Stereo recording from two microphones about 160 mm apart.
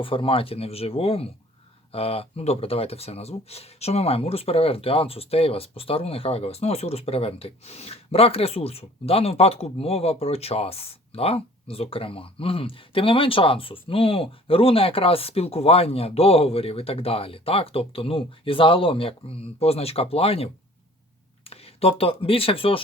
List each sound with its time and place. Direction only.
0.0 s speech: 35° left (ahead or behind)
21.5 s speech: 40° left (ahead or behind)